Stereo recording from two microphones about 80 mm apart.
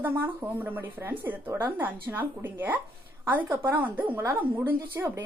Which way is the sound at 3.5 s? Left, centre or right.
Right.